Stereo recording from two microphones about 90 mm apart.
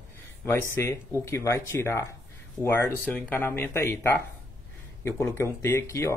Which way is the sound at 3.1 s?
20° left (ahead or behind).